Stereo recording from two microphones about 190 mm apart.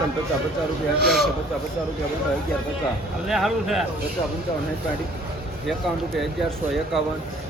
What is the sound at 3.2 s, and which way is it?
Speech, centre (ahead or behind).